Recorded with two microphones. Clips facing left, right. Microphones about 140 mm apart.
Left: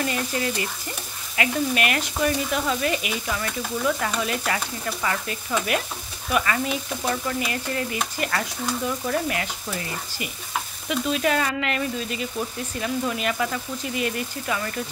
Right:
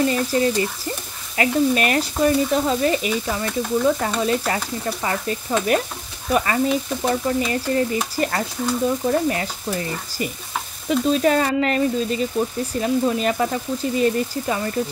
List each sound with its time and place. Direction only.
0.0 s stir: 35° right (ahead or behind)